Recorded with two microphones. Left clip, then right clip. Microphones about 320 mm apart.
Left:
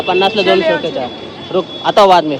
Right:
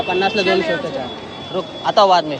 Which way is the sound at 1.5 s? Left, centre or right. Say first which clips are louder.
Left 5 dB; left.